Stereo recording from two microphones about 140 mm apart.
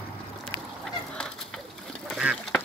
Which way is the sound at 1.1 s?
5° left (ahead or behind).